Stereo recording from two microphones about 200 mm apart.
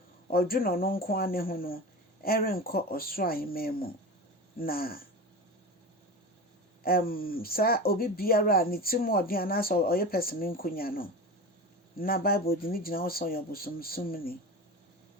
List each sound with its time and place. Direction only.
0.3 s speech: 50° left (ahead or behind)
6.8 s speech: 45° left (ahead or behind)